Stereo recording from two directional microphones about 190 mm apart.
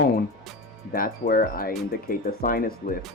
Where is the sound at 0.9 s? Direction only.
50° left (ahead or behind).